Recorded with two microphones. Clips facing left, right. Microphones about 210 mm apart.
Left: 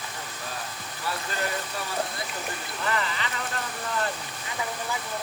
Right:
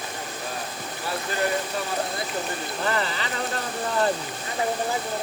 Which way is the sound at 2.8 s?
35° right (ahead or behind).